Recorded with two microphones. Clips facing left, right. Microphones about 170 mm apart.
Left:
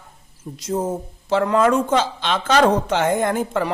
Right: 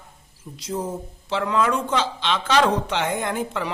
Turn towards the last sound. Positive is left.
turn(degrees=45)  # may be behind; listen again after turning